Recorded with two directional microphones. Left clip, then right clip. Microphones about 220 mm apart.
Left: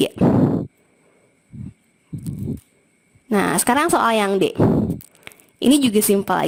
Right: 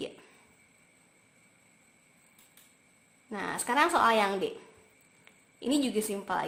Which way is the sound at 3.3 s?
45° left (ahead or behind).